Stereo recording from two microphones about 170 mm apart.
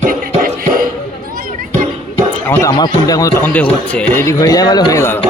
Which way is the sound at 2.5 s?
15° left (ahead or behind).